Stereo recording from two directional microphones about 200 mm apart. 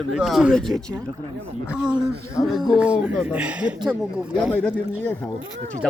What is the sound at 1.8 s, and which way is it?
Speech, 5° right (ahead or behind).